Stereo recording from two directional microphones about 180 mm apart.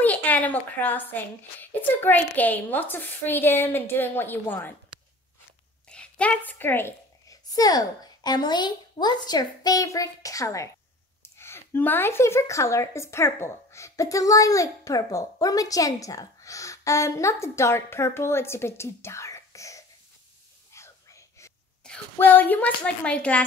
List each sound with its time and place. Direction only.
0.0 s a woman's voice: 10° left (ahead or behind)
5.9 s a woman's voice: 5° left (ahead or behind)
20.7 s whispering: 15° left (ahead or behind)
21.8 s speech: 5° left (ahead or behind)